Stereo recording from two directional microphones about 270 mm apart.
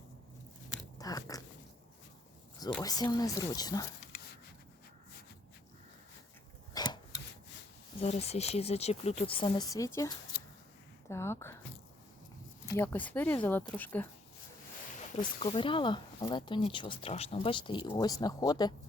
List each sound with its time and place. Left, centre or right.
0.9 s a sound: centre
2.6 s speech: centre
6.7 s filing: centre
8.0 s speech: left
12.7 s speech: centre
15.4 s speech: centre